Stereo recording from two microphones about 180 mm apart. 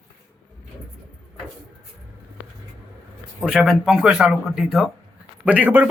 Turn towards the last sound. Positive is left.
turn(degrees=-10)  # may be behind; listen again after turning